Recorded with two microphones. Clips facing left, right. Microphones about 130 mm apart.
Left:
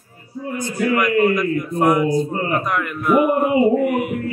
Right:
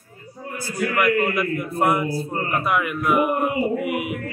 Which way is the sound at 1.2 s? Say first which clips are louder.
Left 5 dB; 5° right (ahead or behind).